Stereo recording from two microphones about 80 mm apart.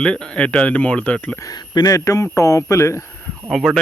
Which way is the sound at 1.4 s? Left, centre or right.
Left.